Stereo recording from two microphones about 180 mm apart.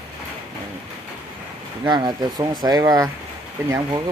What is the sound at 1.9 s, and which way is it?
Speech, 20° right (ahead or behind).